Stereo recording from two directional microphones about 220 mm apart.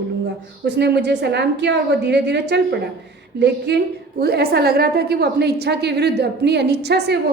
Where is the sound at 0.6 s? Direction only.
50° right (ahead or behind).